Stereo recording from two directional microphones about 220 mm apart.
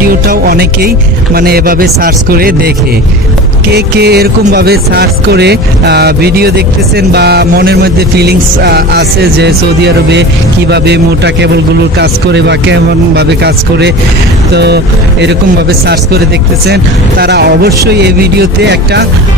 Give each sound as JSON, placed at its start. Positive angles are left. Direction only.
{"t": 0.3, "sound": "speech", "side_deg": -45}
{"t": 3.7, "sound": "speech", "side_deg": -45}
{"t": 16.6, "sound": "speech", "side_deg": -45}